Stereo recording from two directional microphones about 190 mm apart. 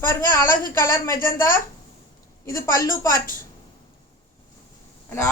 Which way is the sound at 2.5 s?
15° left (ahead or behind).